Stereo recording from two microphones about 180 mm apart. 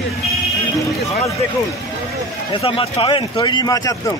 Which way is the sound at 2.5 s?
30° left (ahead or behind).